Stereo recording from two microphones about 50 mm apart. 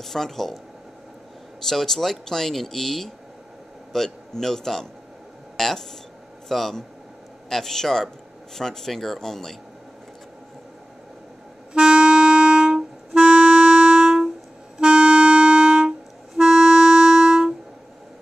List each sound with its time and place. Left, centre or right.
0.0 s speech: centre
1.7 s a man's voice: centre
11.7 s music: right
16.3 s clarinet: centre